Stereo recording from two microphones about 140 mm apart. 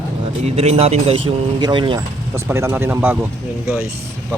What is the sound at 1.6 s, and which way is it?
Speech, 35° right (ahead or behind).